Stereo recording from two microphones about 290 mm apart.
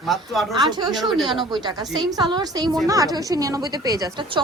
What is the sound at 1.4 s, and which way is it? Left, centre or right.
A woman's voice, centre.